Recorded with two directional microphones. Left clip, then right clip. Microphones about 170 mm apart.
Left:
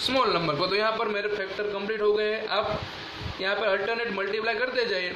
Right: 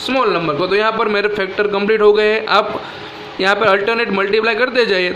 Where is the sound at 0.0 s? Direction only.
20° right (ahead or behind).